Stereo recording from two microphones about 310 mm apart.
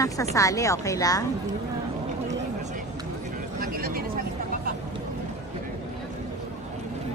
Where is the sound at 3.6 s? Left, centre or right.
Right.